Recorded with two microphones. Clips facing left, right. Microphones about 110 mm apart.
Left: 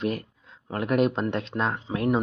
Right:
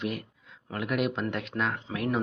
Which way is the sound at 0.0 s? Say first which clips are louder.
Left 5 dB; 35° left (ahead or behind).